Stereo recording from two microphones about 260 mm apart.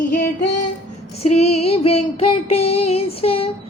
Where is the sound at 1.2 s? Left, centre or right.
Left.